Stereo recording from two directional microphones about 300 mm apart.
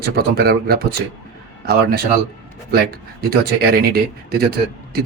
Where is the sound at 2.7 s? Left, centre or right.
Right.